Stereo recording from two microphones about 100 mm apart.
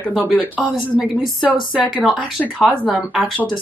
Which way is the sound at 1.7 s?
5° right (ahead or behind).